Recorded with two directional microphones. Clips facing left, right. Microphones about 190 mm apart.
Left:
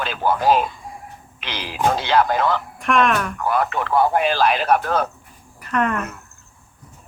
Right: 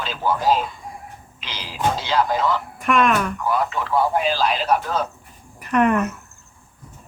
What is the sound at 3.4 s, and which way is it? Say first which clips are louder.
Speech: left 4 dB; 60° left (ahead or behind).